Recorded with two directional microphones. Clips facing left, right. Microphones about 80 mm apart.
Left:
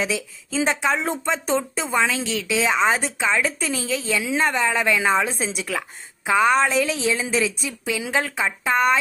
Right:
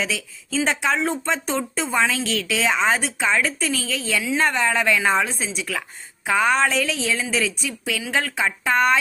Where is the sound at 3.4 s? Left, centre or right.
Centre.